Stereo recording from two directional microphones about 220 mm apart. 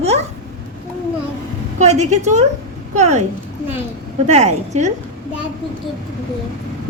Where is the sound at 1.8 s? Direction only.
30° right (ahead or behind).